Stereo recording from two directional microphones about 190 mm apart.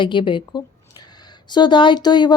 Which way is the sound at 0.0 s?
25° left (ahead or behind).